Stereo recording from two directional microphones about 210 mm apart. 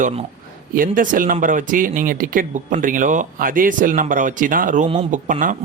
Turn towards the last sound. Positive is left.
turn(degrees=-40)  # may be behind; listen again after turning